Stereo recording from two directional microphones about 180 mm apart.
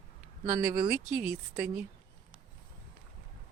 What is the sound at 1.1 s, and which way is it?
Speech, 5° right (ahead or behind).